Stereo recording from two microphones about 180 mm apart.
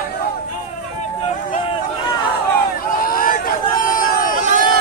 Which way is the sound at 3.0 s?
50° left (ahead or behind).